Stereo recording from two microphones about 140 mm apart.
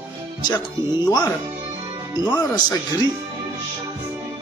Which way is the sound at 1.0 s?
30° left (ahead or behind).